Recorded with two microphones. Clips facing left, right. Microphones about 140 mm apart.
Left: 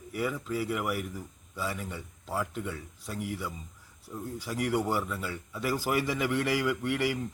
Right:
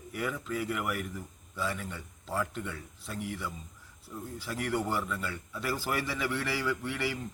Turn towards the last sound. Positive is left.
turn(degrees=10)  # may be behind; listen again after turning